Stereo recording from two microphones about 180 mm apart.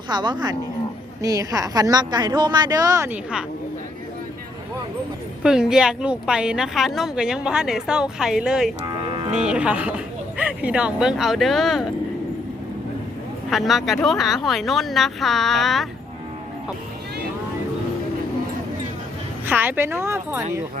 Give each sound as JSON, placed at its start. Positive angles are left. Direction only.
{"t": 0.1, "sound": "a woman's voice", "side_deg": -25}
{"t": 5.4, "sound": "a woman's voice", "side_deg": -5}
{"t": 8.9, "sound": "a sound", "side_deg": -25}
{"t": 9.3, "sound": "a woman's voice", "side_deg": -5}
{"t": 13.5, "sound": "a woman's voice", "side_deg": 0}
{"t": 19.5, "sound": "a woman's voice", "side_deg": -10}